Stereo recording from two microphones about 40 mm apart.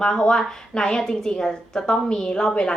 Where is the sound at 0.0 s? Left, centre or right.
Centre.